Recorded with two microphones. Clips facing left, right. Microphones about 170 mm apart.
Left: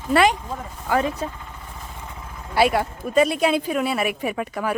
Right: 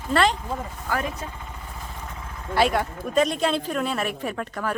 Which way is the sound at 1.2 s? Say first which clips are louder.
Left 7 dB; 30° left (ahead or behind).